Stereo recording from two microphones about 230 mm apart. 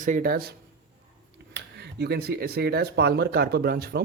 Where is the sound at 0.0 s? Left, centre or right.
Right.